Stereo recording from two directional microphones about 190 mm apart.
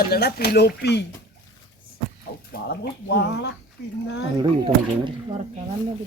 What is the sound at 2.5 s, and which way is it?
Speech, 60° left (ahead or behind).